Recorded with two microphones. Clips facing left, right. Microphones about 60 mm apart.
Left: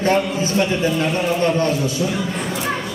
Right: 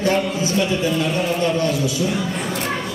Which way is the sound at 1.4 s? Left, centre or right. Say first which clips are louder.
Left 2 dB; left.